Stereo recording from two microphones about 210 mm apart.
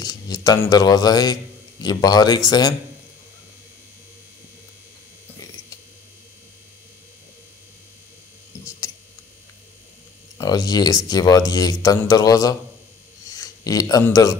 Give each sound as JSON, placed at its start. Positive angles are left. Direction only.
{"t": 0.0, "sound": "speech", "side_deg": 20}
{"t": 8.5, "sound": "a sound", "side_deg": 15}
{"t": 10.3, "sound": "a man's voice", "side_deg": 15}